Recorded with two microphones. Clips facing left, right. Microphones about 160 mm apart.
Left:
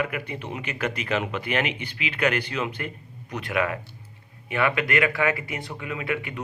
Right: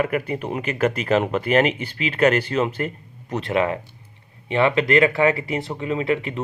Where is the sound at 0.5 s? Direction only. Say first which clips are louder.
Right 8 dB; 35° right (ahead or behind).